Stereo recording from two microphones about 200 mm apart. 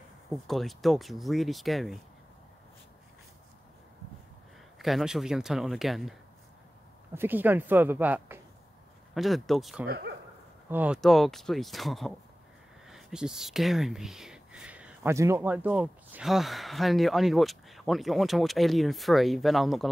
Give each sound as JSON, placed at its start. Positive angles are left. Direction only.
{"t": 0.3, "sound": "speech", "side_deg": 0}
{"t": 4.7, "sound": "speech", "side_deg": 0}
{"t": 7.2, "sound": "speech", "side_deg": -10}
{"t": 9.8, "sound": "speech", "side_deg": -55}
{"t": 10.7, "sound": "speech", "side_deg": -5}